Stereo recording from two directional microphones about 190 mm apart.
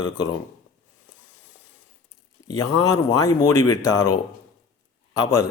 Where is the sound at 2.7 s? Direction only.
15° left (ahead or behind).